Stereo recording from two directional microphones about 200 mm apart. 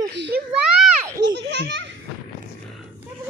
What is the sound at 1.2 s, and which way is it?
Speech, 60° right (ahead or behind).